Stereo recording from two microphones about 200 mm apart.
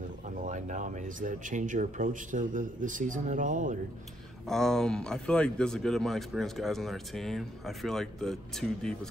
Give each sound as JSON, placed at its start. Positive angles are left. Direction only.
{"t": 0.4, "sound": "speech", "side_deg": -40}
{"t": 4.5, "sound": "a man's voice", "side_deg": 0}